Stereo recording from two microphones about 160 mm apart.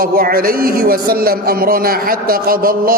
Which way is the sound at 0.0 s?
65° right (ahead or behind).